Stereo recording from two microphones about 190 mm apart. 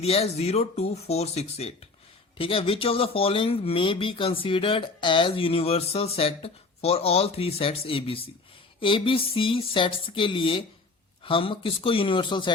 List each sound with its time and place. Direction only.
0.0 s speech: 30° left (ahead or behind)